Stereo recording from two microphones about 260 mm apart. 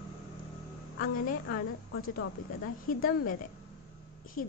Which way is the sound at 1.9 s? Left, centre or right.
Left.